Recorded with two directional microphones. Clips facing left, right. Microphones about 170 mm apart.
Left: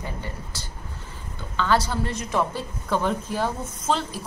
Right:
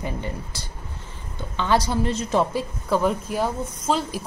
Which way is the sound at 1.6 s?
20° right (ahead or behind).